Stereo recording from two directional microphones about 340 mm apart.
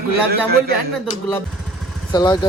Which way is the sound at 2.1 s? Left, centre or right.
Centre.